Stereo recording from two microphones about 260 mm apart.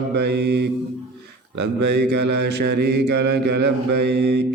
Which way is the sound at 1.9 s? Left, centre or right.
Right.